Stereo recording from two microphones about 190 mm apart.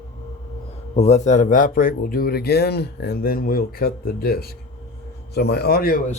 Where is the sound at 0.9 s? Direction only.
35° left (ahead or behind).